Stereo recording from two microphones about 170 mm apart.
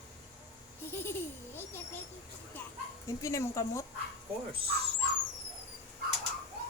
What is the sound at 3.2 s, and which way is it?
Speech, 20° left (ahead or behind).